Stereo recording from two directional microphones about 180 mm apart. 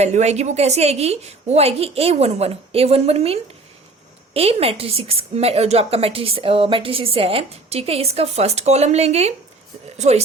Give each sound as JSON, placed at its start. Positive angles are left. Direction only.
{"t": 0.0, "sound": "a woman's voice", "side_deg": -40}
{"t": 4.4, "sound": "a woman's voice", "side_deg": -35}